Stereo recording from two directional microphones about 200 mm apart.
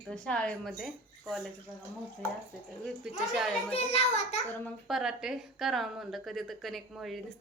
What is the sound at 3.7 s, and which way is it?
Speech, 30° left (ahead or behind).